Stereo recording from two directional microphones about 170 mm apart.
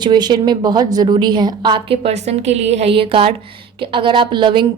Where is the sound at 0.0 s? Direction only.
25° right (ahead or behind).